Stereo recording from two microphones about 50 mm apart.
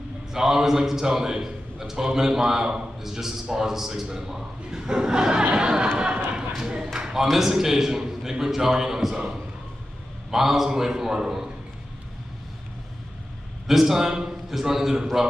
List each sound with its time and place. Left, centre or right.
0.3 s a man's voice: centre
5.9 s a sound: centre
7.2 s a man's voice: centre
10.3 s a man's voice: centre
13.7 s a man's voice: centre